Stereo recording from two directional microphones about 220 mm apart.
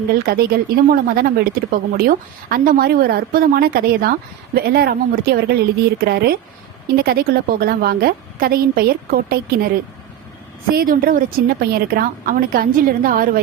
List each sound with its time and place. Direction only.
0.1 s a woman's voice: 45° right (ahead or behind)